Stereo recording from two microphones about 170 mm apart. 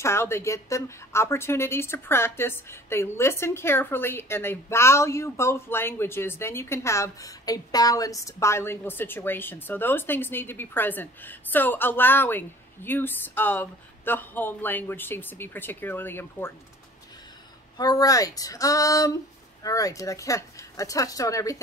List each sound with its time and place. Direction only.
0.0 s a woman's voice: 15° left (ahead or behind)
17.7 s speech: 20° left (ahead or behind)